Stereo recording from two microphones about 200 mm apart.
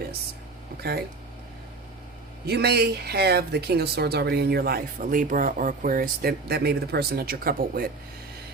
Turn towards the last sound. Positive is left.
turn(degrees=-45)  # may be behind; listen again after turning